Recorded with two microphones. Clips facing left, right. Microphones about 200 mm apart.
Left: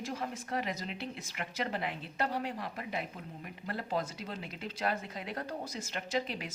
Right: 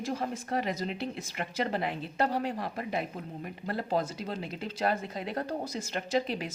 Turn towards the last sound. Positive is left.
turn(degrees=-35)  # may be behind; listen again after turning